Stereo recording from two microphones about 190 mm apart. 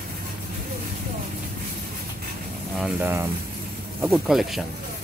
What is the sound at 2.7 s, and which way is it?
Speech, 5° right (ahead or behind).